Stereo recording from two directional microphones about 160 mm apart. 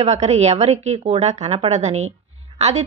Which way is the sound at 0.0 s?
45° right (ahead or behind).